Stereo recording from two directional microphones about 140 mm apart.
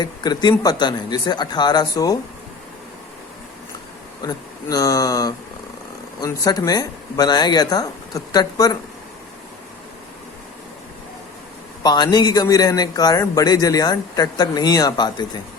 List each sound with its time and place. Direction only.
0.0 s speech: 30° left (ahead or behind)
4.2 s a man's voice: 25° left (ahead or behind)
11.8 s a man's voice: 30° left (ahead or behind)